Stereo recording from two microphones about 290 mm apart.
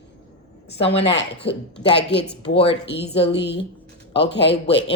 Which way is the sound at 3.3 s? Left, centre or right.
Left.